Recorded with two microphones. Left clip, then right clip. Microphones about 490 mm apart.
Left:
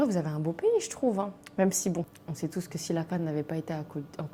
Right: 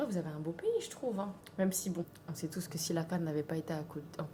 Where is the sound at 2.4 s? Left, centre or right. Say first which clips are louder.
Left 5 dB; centre.